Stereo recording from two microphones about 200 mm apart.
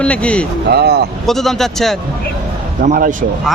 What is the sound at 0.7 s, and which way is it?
Speech, 55° right (ahead or behind).